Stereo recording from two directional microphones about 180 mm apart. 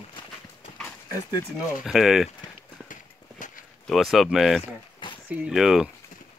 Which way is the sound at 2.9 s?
50° left (ahead or behind).